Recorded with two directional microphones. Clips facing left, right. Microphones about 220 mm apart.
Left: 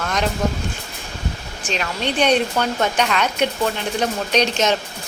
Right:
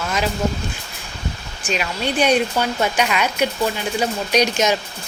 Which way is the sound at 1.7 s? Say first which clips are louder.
Right 1 dB; 10° right (ahead or behind).